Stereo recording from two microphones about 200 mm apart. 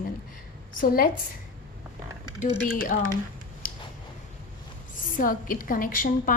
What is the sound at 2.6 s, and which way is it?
Speech, 45° left (ahead or behind).